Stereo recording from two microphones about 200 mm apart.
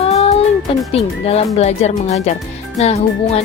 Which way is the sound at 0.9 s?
30° left (ahead or behind).